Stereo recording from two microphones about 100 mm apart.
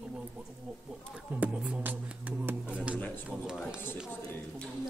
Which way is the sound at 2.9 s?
15° left (ahead or behind).